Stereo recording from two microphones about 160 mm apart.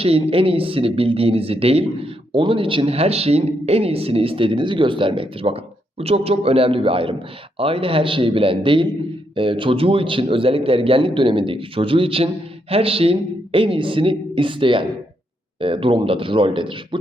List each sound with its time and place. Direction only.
0.0 s speech: 35° right (ahead or behind)